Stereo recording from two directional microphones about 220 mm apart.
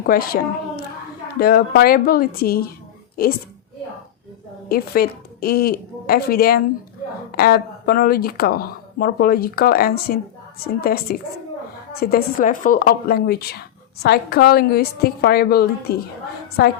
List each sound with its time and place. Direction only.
0.0 s speech: 45° left (ahead or behind)
1.4 s speech: 45° left (ahead or behind)
4.7 s a woman's voice: 45° left (ahead or behind)